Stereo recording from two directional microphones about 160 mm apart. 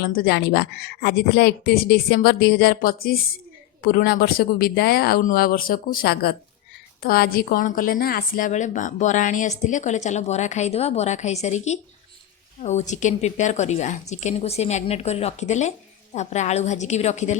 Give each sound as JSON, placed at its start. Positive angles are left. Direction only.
{"t": 0.0, "sound": "a woman's voice", "side_deg": 75}
{"t": 2.7, "sound": "a woman's voice", "side_deg": 65}